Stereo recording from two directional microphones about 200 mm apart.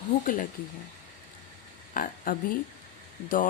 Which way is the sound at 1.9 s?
40° left (ahead or behind).